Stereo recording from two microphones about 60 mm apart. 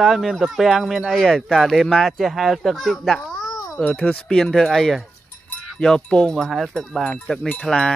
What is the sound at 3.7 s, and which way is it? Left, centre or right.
Speech, centre.